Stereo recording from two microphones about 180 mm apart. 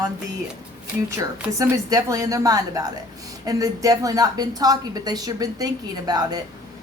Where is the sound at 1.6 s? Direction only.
20° right (ahead or behind).